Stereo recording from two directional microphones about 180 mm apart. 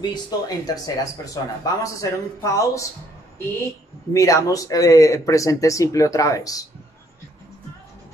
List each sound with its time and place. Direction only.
0.0 s speech: 20° left (ahead or behind)
4.1 s speech: 20° left (ahead or behind)